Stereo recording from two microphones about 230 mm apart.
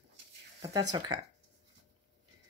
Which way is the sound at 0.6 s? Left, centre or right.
Centre.